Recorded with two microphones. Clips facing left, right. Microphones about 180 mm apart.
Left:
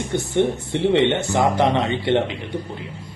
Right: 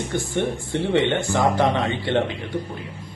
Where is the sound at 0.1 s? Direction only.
20° left (ahead or behind).